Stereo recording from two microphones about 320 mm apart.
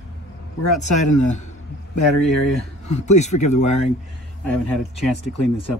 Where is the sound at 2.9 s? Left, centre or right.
Left.